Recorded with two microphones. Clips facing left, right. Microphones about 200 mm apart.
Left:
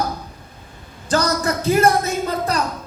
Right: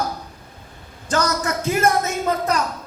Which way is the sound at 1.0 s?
35° left (ahead or behind).